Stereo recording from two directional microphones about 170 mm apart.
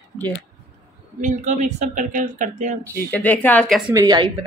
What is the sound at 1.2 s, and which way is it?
Speech, 45° right (ahead or behind).